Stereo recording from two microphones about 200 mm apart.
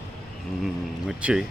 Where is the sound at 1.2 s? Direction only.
5° right (ahead or behind).